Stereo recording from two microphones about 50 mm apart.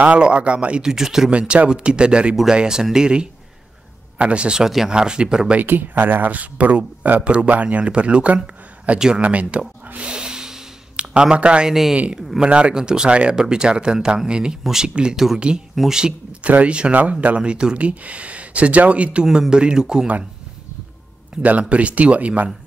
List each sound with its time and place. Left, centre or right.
0.0 s speech: right
0.8 s speech: centre
5.6 s speech: right
9.9 s snort: centre
12.4 s speech: right
17.4 s speech: centre
19.2 s speech: centre
21.4 s speech: right